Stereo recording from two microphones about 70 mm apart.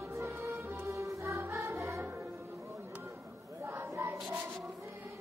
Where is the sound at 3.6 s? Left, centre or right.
Right.